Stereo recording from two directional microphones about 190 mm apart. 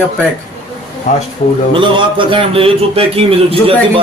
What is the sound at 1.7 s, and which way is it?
Speech, 25° right (ahead or behind).